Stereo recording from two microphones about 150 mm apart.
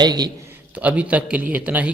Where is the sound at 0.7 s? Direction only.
10° right (ahead or behind).